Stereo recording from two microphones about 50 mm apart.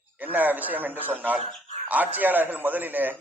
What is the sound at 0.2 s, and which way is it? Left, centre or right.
A man's voice, right.